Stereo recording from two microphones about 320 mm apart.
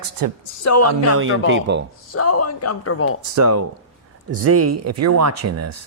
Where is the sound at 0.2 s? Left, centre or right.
Right.